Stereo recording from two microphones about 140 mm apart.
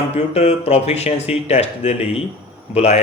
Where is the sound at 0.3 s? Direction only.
50° left (ahead or behind).